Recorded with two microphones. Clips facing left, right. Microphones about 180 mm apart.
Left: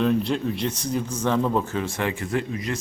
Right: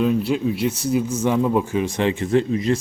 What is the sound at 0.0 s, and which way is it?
Speech, 5° right (ahead or behind).